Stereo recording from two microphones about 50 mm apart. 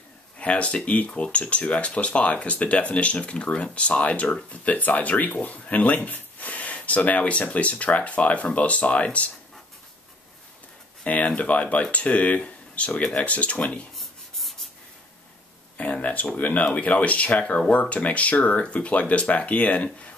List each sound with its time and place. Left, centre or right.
0.4 s speech: left
11.1 s speech: left
13.9 s rub: centre
15.8 s a sound: left
16.3 s speech: left